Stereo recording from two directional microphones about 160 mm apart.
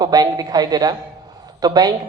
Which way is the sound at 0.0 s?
25° right (ahead or behind).